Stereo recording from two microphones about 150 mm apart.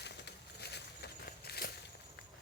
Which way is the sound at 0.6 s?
90° left.